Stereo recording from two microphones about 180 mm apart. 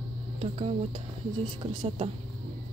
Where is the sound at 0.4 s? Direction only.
35° right (ahead or behind).